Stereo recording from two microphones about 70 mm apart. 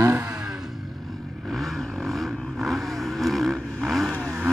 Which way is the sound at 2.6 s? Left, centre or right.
Centre.